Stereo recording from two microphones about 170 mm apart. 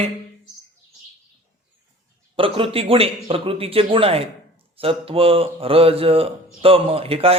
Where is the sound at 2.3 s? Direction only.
30° right (ahead or behind).